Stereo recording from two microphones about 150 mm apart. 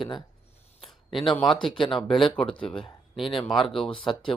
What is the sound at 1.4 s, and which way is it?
Speech, 30° left (ahead or behind).